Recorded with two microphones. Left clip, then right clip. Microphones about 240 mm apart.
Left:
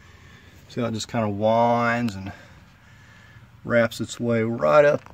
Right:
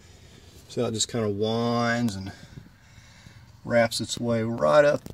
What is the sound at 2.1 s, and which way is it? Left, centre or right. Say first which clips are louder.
Speech: left 1 dB; centre.